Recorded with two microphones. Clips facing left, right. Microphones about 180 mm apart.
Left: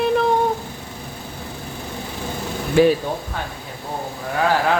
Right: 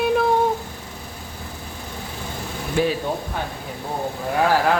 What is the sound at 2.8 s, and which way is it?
Speech, 90° left.